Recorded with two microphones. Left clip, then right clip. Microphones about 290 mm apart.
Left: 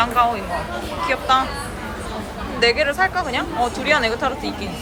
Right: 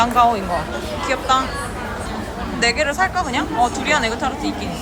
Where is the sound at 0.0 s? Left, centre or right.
Centre.